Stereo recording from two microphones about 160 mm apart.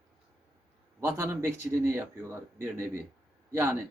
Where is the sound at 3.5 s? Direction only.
15° right (ahead or behind).